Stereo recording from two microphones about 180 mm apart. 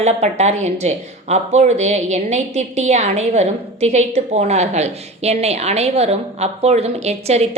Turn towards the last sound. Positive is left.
turn(degrees=-35)  # may be behind; listen again after turning